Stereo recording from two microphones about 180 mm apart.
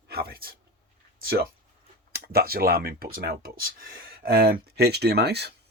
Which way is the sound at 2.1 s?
60° right (ahead or behind).